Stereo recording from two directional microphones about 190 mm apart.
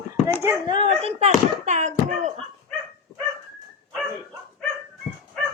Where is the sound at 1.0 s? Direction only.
35° right (ahead or behind).